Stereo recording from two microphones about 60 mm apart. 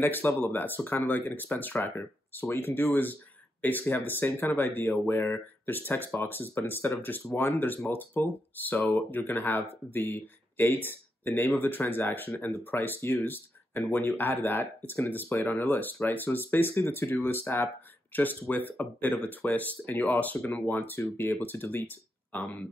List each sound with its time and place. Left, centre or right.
0.0 s speech: left
18.1 s speech: left